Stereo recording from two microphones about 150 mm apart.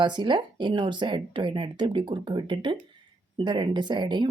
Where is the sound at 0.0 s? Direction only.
30° right (ahead or behind).